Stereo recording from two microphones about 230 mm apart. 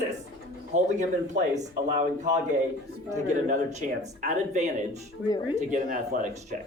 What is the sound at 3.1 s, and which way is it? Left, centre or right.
Speech, right.